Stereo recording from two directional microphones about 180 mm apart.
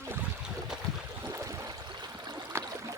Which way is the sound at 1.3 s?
15° right (ahead or behind).